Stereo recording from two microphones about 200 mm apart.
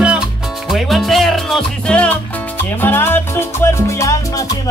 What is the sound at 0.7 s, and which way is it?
Music, centre (ahead or behind).